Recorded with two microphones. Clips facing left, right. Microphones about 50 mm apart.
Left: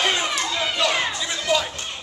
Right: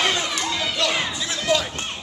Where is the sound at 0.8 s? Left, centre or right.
Centre.